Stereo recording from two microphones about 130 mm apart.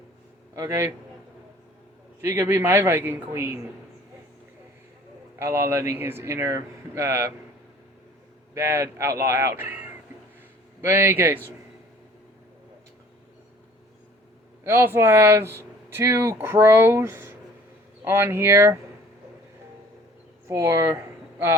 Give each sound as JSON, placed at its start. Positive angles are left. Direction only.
{"t": 0.5, "sound": "speech", "side_deg": -20}
{"t": 2.2, "sound": "a man's voice", "side_deg": -20}
{"t": 5.4, "sound": "speech", "side_deg": -20}
{"t": 8.5, "sound": "a man's voice", "side_deg": -20}
{"t": 14.6, "sound": "speech", "side_deg": -20}
{"t": 20.5, "sound": "speech", "side_deg": -20}